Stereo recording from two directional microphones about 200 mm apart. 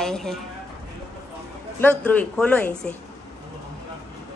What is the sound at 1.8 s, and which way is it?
A woman's voice, 5° left (ahead or behind).